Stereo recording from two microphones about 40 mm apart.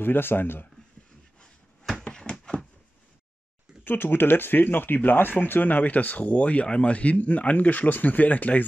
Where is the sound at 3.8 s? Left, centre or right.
Left.